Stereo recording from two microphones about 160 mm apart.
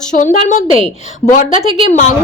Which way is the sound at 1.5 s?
35° right (ahead or behind).